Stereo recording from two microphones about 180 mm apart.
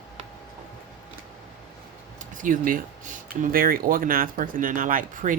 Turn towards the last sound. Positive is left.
turn(degrees=-50)  # may be behind; listen again after turning